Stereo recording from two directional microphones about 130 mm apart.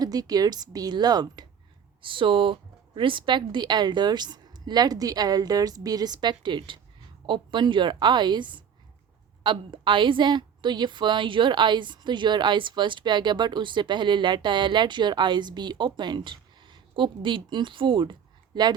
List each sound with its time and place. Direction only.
0.0 s a woman's voice: 30° right (ahead or behind)